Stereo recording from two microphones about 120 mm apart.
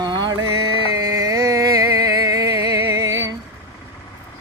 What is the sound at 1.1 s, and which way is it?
Music, 30° right (ahead or behind).